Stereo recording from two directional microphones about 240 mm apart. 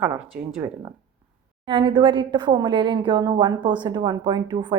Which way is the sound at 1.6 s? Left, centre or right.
Centre.